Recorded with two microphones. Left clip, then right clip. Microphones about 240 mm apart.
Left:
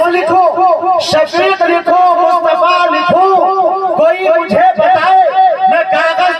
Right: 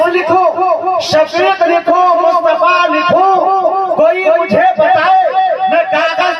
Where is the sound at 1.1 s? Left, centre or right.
Left.